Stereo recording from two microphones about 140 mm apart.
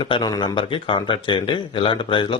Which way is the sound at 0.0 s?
35° left (ahead or behind).